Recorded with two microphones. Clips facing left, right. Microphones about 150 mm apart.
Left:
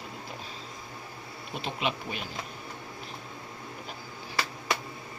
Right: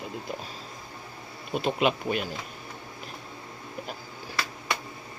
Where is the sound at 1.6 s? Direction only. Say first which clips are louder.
Right 7 dB; 50° right (ahead or behind).